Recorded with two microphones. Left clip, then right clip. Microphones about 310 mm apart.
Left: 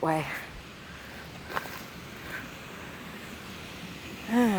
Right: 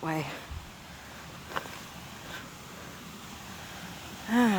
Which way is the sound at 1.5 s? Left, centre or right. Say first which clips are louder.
Left 2 dB; left.